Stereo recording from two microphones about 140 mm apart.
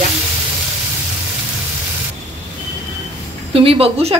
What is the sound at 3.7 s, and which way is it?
Speech, 40° right (ahead or behind).